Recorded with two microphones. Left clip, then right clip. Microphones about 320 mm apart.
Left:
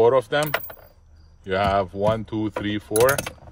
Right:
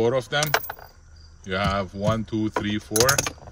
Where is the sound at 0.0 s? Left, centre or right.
Centre.